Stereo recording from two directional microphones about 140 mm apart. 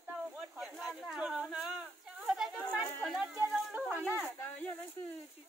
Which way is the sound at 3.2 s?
15° right (ahead or behind).